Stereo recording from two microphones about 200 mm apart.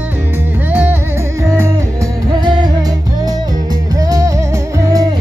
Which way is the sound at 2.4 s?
20° right (ahead or behind).